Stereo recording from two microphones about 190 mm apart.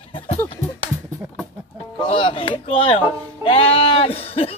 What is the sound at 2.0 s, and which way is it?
Speech, 25° left (ahead or behind).